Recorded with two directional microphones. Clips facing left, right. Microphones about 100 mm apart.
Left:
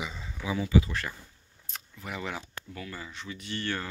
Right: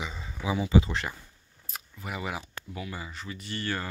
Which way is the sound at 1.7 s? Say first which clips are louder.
Right 1 dB; 5° right (ahead or behind).